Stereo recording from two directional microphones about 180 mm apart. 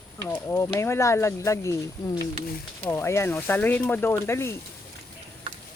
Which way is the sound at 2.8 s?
10° left (ahead or behind).